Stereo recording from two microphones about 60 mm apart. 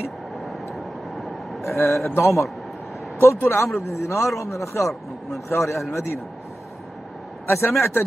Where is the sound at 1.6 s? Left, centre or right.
Left.